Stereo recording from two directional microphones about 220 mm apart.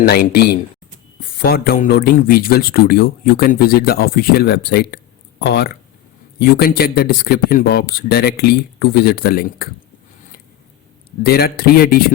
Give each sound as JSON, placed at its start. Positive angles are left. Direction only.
{"t": 0.0, "sound": "a man's voice", "side_deg": 45}
{"t": 11.2, "sound": "a man's voice", "side_deg": 45}